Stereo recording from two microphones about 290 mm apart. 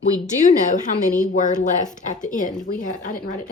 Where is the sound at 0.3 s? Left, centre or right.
Left.